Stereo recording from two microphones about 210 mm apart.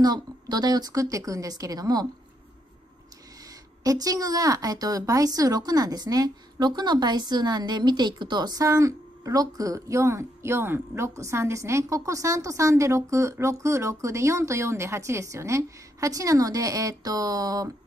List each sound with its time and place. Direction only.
0.0 s a woman's voice: 20° right (ahead or behind)
3.8 s a woman's voice: 15° right (ahead or behind)